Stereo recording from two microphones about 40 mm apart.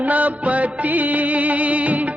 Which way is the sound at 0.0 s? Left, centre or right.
Right.